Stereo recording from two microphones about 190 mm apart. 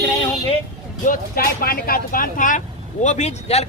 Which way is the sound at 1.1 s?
50° left (ahead or behind).